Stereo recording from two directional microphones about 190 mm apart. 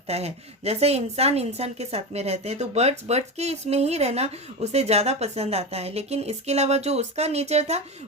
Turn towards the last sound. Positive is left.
turn(degrees=-35)  # may be behind; listen again after turning